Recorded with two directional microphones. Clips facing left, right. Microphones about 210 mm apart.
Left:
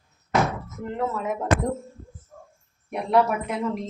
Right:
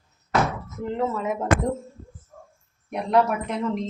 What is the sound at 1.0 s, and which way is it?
Speech, 5° left (ahead or behind).